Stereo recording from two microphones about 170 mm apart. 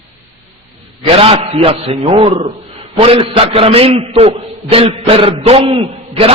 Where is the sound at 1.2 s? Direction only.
35° right (ahead or behind).